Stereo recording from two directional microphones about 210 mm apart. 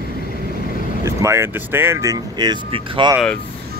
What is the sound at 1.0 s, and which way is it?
Speech, 15° right (ahead or behind).